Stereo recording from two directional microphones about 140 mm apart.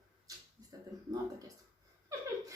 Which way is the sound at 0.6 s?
25° right (ahead or behind).